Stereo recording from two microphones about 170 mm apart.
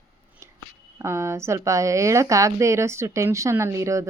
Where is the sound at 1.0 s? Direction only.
15° right (ahead or behind).